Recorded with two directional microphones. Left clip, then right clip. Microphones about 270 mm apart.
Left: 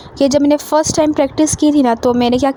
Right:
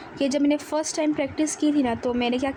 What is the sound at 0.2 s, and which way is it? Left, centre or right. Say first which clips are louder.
A woman's voice: left 11 dB; left.